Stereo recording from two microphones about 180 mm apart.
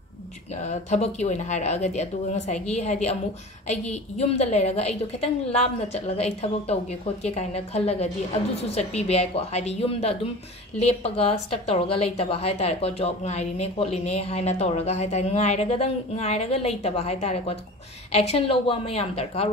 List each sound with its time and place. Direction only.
0.7 s a woman's voice: 40° left (ahead or behind)